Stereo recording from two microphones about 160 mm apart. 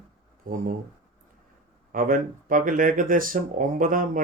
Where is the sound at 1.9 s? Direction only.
60° right (ahead or behind).